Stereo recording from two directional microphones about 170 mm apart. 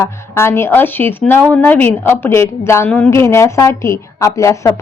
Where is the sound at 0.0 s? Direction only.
15° left (ahead or behind).